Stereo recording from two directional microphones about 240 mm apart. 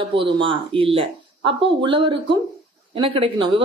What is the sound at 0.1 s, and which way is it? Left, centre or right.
Speech, right.